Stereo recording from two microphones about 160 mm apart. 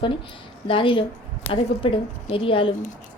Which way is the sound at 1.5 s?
20° left (ahead or behind).